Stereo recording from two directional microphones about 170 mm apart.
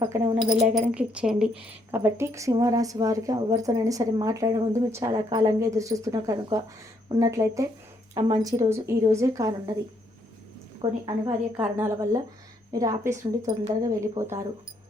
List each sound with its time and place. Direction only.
0.0 s a woman's voice: 25° right (ahead or behind)
0.7 s speech: 5° right (ahead or behind)
1.9 s a woman's voice: 15° right (ahead or behind)
10.8 s a woman's voice: 20° right (ahead or behind)